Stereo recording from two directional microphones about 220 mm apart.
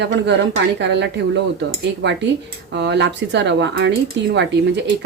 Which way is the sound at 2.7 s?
55° right (ahead or behind).